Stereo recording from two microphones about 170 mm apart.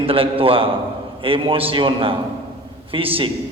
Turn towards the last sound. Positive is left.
turn(degrees=-35)  # may be behind; listen again after turning